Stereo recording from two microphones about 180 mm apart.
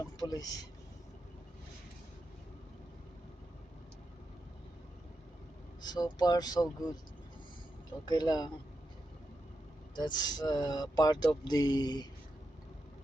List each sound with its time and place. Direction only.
0.2 s speech: 20° left (ahead or behind)
5.8 s speech: 25° left (ahead or behind)
8.0 s speech: 20° left (ahead or behind)
9.9 s speech: 25° left (ahead or behind)